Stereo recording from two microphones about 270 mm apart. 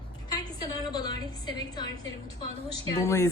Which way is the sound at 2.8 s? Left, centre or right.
Centre.